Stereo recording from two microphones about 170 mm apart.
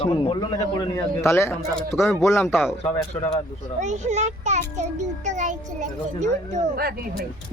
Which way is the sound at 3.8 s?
45° right (ahead or behind).